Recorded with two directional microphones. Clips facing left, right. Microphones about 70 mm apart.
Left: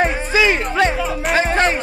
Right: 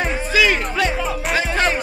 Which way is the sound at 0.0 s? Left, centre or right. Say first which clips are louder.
Left 2 dB; left.